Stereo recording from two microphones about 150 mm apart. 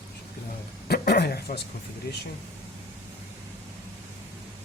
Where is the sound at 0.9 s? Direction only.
90° left.